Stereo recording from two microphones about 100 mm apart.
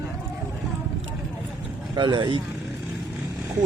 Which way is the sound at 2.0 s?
45° right (ahead or behind).